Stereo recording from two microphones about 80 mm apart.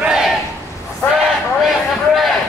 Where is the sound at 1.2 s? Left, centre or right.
Centre.